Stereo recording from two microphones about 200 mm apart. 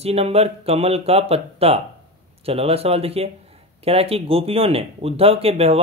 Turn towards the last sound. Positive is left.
turn(degrees=-30)  # may be behind; listen again after turning